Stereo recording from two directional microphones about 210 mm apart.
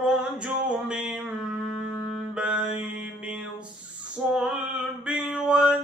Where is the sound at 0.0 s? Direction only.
5° right (ahead or behind).